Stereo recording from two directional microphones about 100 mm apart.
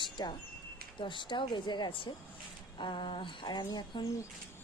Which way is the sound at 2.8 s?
55° left (ahead or behind).